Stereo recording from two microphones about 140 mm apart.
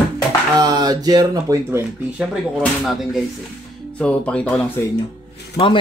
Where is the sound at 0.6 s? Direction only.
30° right (ahead or behind).